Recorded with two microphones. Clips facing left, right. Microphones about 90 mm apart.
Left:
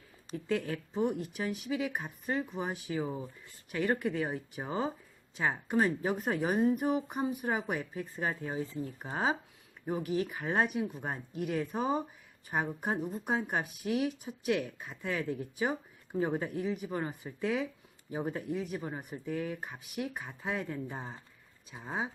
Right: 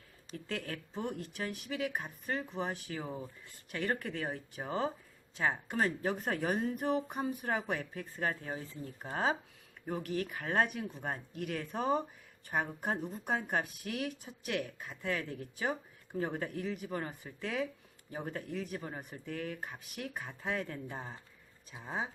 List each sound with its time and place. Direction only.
0.3 s speech: 20° left (ahead or behind)